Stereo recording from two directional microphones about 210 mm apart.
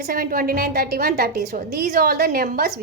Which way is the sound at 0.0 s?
45° right (ahead or behind).